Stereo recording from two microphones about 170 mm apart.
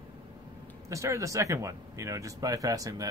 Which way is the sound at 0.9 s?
20° right (ahead or behind).